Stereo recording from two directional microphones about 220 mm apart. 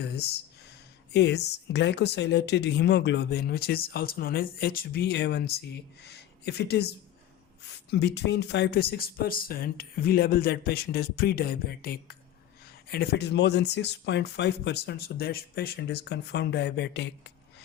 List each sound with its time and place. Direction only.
1.1 s speech: 50° left (ahead or behind)